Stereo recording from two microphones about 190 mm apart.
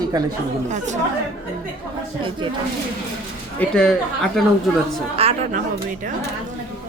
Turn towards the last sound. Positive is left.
turn(degrees=-30)  # may be behind; listen again after turning